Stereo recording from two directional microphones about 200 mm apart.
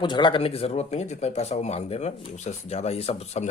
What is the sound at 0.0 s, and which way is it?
Speech, 25° left (ahead or behind).